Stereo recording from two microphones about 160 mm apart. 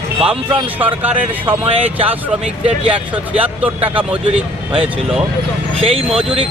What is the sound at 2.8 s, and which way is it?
Speech, 10° right (ahead or behind).